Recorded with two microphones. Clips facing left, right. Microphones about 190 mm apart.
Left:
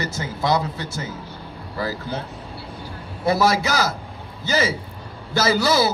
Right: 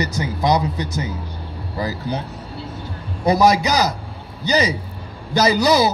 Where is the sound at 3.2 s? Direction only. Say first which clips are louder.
Right 4 dB; 15° right (ahead or behind).